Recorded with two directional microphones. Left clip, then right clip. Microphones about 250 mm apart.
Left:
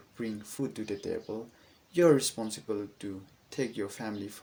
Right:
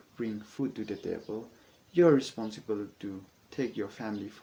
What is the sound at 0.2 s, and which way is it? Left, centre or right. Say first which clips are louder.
Speech: right 1 dB; left.